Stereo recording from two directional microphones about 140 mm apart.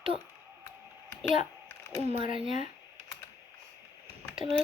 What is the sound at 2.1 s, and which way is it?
Speech, 40° right (ahead or behind).